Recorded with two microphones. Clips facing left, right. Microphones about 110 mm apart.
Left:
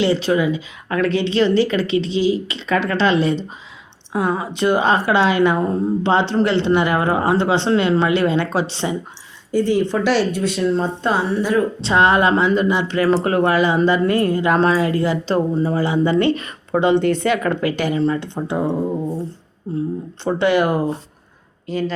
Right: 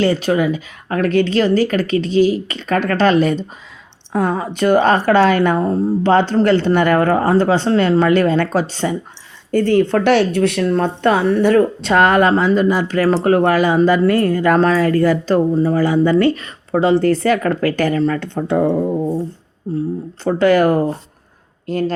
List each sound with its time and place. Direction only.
0.0 s speech: 45° right (ahead or behind)
18.1 s speech: 60° right (ahead or behind)
20.2 s speech: 45° right (ahead or behind)
21.7 s speech: 50° right (ahead or behind)